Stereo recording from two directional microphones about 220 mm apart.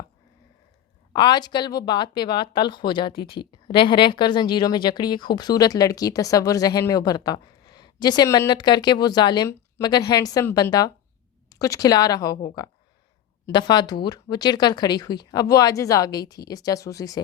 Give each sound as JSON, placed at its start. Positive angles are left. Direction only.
{"t": 1.1, "sound": "speech", "side_deg": 20}